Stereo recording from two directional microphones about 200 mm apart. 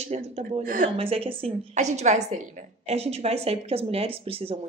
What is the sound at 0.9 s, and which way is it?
Speech, 30° right (ahead or behind).